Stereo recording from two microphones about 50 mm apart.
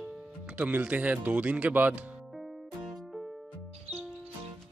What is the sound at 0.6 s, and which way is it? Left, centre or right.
Speech, right.